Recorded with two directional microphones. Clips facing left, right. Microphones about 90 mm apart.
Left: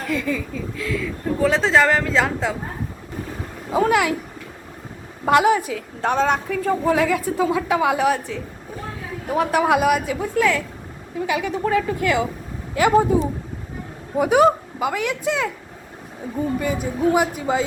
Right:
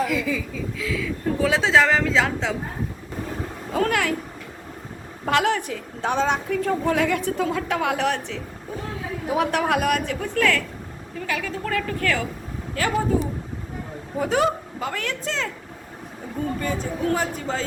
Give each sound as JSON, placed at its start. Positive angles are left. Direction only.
{"t": 0.0, "sound": "a woman's voice", "side_deg": 0}
{"t": 3.7, "sound": "speech", "side_deg": 10}
{"t": 5.2, "sound": "a woman's voice", "side_deg": 10}
{"t": 16.6, "sound": "speech", "side_deg": 10}